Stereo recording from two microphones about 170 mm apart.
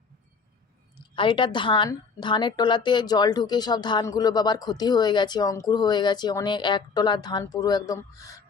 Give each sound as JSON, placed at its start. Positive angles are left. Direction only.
{"t": 0.9, "sound": "a woman's voice", "side_deg": 30}